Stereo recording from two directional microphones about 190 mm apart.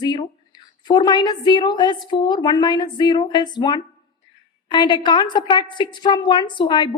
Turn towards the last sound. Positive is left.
turn(degrees=25)  # may be behind; listen again after turning